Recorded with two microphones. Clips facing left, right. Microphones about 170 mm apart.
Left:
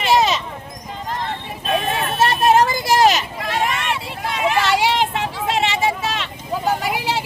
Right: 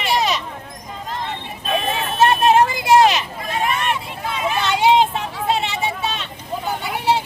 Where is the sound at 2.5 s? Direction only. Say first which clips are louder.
Right 1 dB; 40° left (ahead or behind).